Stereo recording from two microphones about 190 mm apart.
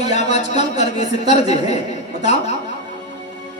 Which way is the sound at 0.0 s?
35° left (ahead or behind).